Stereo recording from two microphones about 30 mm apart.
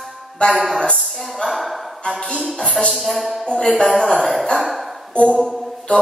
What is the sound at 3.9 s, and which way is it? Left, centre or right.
Speech, centre.